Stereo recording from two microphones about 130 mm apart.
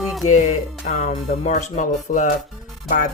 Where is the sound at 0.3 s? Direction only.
65° left (ahead or behind).